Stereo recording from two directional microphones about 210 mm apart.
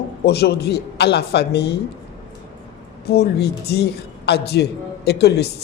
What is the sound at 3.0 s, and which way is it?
A man's voice, 50° left (ahead or behind).